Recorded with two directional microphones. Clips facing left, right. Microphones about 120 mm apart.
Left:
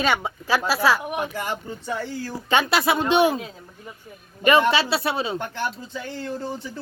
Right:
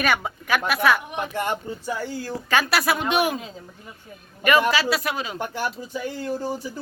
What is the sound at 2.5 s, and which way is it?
Speech, 25° left (ahead or behind).